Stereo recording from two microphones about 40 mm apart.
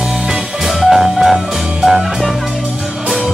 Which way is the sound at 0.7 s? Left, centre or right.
Centre.